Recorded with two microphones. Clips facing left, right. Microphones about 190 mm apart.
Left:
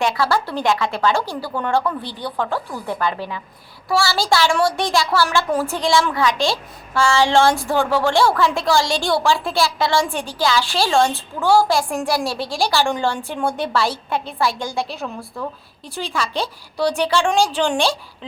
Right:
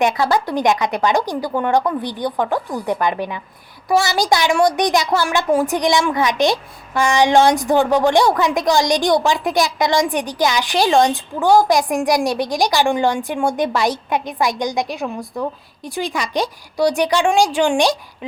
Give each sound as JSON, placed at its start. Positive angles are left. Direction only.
{"t": 0.0, "sound": "a woman's voice", "side_deg": -20}